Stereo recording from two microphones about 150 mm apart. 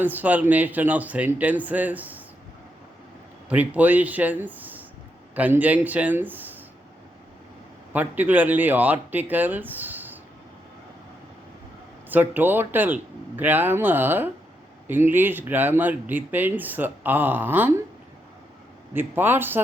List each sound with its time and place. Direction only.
0.0 s speech: 10° right (ahead or behind)
3.5 s speech: 10° right (ahead or behind)
7.9 s speech: 10° right (ahead or behind)
12.0 s speech: 10° right (ahead or behind)
18.9 s speech: 15° right (ahead or behind)